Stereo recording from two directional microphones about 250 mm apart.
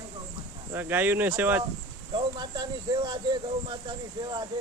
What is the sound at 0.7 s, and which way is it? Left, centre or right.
Speech, centre.